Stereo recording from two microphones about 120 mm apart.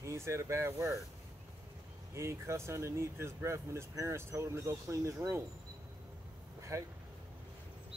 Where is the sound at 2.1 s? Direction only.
25° right (ahead or behind).